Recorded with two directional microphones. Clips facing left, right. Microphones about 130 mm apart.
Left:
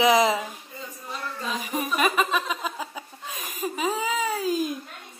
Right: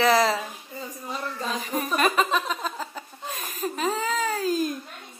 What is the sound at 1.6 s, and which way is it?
Speech, 10° left (ahead or behind).